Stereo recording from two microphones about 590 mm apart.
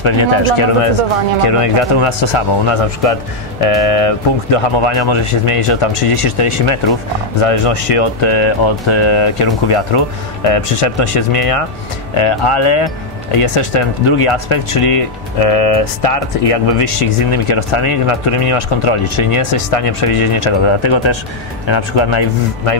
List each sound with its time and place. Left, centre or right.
0.0 s speech: left
4.7 s speech: left